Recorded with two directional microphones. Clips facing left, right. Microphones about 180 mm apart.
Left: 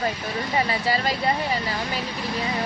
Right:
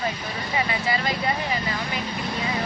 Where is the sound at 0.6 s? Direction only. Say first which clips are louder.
Left 1 dB; 35° left (ahead or behind).